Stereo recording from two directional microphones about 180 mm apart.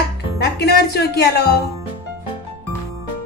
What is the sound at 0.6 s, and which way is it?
Speech, 65° left (ahead or behind).